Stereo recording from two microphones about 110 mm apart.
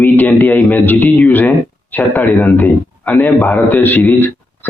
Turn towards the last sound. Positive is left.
turn(degrees=15)  # may be behind; listen again after turning